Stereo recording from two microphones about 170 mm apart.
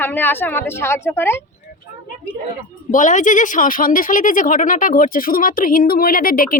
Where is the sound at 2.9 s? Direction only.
50° left (ahead or behind).